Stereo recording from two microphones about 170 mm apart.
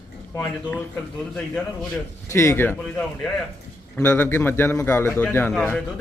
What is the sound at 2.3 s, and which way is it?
Speech, 15° left (ahead or behind).